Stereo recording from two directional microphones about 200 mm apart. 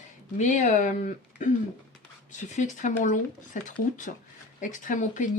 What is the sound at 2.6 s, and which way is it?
Speech, 40° left (ahead or behind).